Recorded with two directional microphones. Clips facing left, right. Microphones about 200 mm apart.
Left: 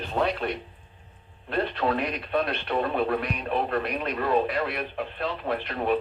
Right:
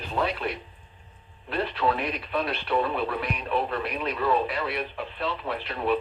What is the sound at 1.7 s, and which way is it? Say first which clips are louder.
Speech: even; 45° left (ahead or behind).